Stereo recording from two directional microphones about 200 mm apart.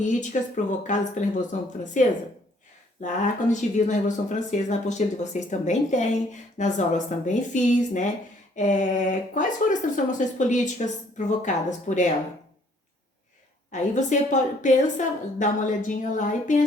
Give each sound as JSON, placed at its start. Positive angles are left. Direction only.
{"t": 0.0, "sound": "speech", "side_deg": 40}
{"t": 13.7, "sound": "speech", "side_deg": 40}